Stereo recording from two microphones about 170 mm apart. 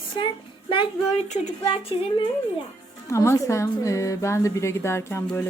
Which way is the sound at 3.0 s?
15° left (ahead or behind).